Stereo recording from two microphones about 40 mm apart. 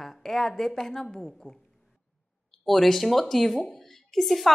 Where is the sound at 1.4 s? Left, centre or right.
Centre.